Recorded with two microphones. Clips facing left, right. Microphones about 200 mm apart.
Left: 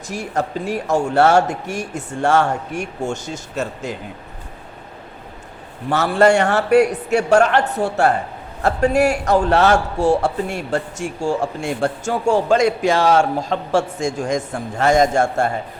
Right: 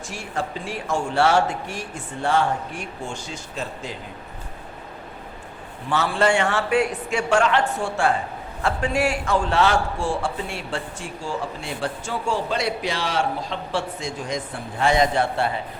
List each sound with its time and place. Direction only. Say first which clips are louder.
0.1 s a man's voice: left 7 dB; 40° left (ahead or behind)
5.9 s a man's voice: left 6 dB; 45° left (ahead or behind)
7.4 s speech: left 3 dB; 55° left (ahead or behind)
7.8 s a man's voice: left 5 dB; 40° left (ahead or behind)